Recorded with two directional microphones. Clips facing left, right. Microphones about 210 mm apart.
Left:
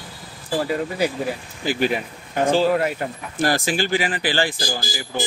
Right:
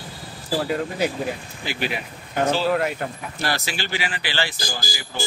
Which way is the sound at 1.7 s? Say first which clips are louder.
Left 7 dB; 45° left (ahead or behind).